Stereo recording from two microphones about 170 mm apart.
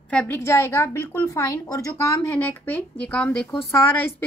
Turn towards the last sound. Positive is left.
turn(degrees=10)  # may be behind; listen again after turning